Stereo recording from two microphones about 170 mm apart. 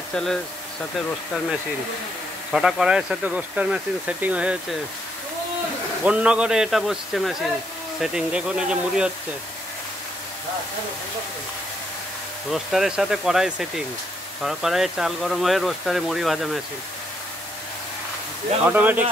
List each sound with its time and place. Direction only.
0.1 s speech: 5° left (ahead or behind)
2.5 s speech: 5° right (ahead or behind)
6.0 s speech: 5° right (ahead or behind)
12.4 s speech: centre (ahead or behind)
18.7 s speech: 10° right (ahead or behind)